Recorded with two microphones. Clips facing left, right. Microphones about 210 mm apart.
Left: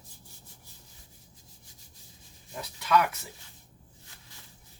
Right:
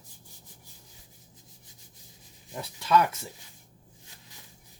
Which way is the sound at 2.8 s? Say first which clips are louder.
Right 2 dB; 30° right (ahead or behind).